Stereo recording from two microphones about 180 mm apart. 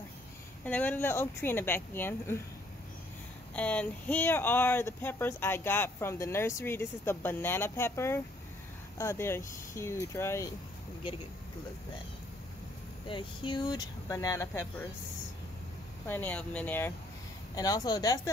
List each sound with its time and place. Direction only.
0.7 s speech: 10° left (ahead or behind)
3.5 s speech: 5° left (ahead or behind)
13.1 s speech: 25° left (ahead or behind)
16.1 s speech: 10° left (ahead or behind)
17.6 s speech: 20° left (ahead or behind)